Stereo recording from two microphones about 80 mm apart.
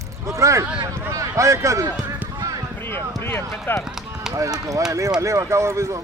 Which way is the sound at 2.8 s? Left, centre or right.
Left.